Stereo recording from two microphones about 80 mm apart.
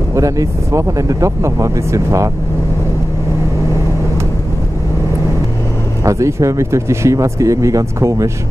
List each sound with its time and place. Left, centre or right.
0.1 s speech: right
6.0 s speech: right